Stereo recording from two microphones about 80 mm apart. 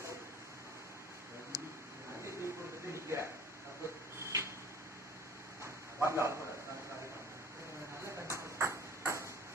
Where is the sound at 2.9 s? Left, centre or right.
Right.